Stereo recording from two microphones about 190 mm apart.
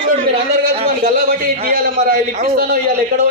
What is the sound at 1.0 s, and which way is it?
A man's voice, 50° right (ahead or behind).